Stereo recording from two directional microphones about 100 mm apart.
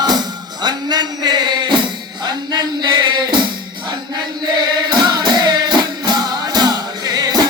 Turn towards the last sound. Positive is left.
turn(degrees=-40)  # may be behind; listen again after turning